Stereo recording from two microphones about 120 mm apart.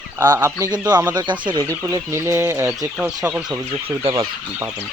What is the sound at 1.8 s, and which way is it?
Speech, 25° right (ahead or behind).